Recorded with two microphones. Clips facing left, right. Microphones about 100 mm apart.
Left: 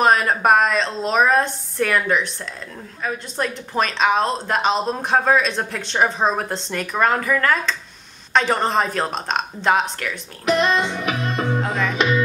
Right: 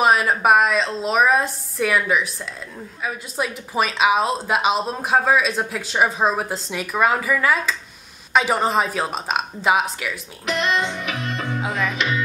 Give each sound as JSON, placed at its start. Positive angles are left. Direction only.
{"t": 0.0, "sound": "speech", "side_deg": -5}
{"t": 10.4, "sound": "music", "side_deg": 40}
{"t": 11.6, "sound": "music", "side_deg": -5}